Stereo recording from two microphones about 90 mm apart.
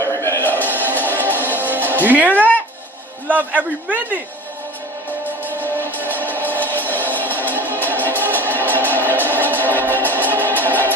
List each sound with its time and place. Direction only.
0.2 s music: 25° left (ahead or behind)
3.3 s a man's voice: 20° right (ahead or behind)
5.5 s music: 20° left (ahead or behind)